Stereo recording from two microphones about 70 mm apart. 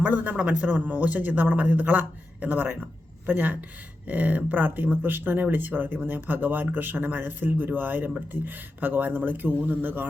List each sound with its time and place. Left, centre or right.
0.0 s speech: right